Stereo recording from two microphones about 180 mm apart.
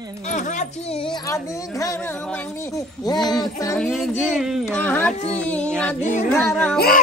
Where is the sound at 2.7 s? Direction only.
20° left (ahead or behind).